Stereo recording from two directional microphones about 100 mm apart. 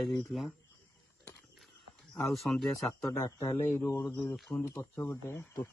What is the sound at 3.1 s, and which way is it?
Speech, 35° left (ahead or behind).